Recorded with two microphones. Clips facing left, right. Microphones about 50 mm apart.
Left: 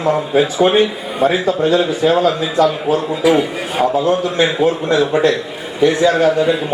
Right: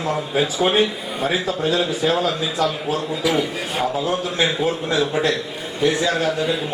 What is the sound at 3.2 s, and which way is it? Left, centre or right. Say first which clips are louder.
A man's voice: left 7 dB; centre.